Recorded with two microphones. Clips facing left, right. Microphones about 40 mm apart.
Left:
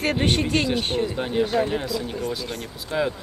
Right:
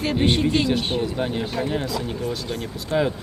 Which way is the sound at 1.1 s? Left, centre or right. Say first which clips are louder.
Left 3 dB; centre.